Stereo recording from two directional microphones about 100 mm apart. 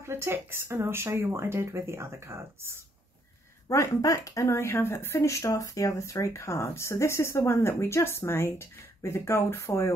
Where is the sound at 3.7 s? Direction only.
35° left (ahead or behind).